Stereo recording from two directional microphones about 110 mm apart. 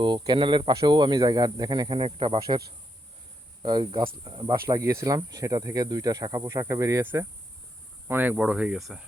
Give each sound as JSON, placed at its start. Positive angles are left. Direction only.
{"t": 0.0, "sound": "speech", "side_deg": -45}
{"t": 0.7, "sound": "speech", "side_deg": -35}
{"t": 3.6, "sound": "speech", "side_deg": -45}
{"t": 4.6, "sound": "speech", "side_deg": -25}
{"t": 7.0, "sound": "speech", "side_deg": -20}